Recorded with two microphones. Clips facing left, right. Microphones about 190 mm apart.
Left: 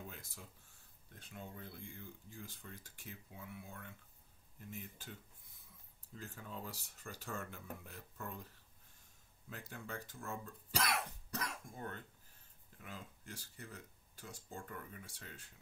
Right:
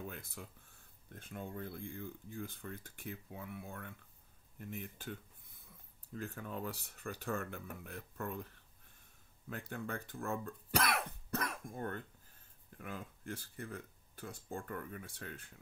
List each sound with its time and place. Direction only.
0.1 s speech: 60° right (ahead or behind)
6.1 s speech: 60° right (ahead or behind)
9.5 s speech: 55° right (ahead or behind)